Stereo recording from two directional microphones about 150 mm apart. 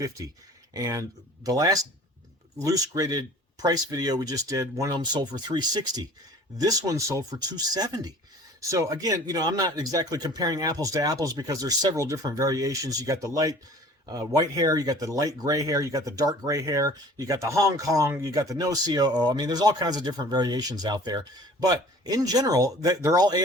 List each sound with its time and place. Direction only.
0.2 s speech: 25° right (ahead or behind)